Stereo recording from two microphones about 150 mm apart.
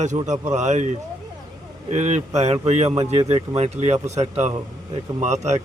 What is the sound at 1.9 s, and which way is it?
A man's voice, 50° right (ahead or behind).